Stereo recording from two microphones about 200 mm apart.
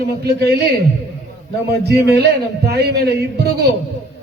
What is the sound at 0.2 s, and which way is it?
Speech, 55° right (ahead or behind).